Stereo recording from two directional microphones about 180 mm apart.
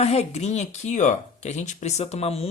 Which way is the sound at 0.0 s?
35° left (ahead or behind).